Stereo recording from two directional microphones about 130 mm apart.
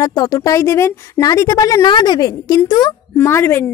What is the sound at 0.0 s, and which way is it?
Speech, 30° left (ahead or behind).